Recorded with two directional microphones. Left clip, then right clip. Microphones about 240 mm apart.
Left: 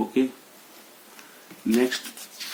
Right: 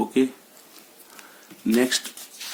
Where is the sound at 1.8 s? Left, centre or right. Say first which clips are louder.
Right 2 dB; right.